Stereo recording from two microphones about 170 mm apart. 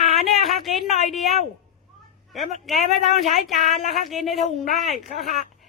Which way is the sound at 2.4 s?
Centre (ahead or behind).